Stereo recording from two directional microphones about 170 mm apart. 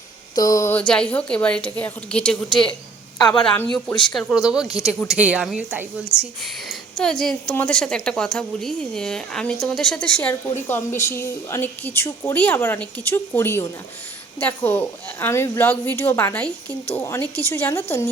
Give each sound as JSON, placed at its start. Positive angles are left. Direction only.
{"t": 0.3, "sound": "a woman's voice", "side_deg": 20}
{"t": 3.2, "sound": "a woman's voice", "side_deg": 25}
{"t": 4.1, "sound": "a woman's voice", "side_deg": 5}